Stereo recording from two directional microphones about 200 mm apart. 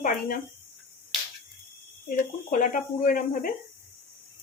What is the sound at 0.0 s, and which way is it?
Speech, 40° left (ahead or behind).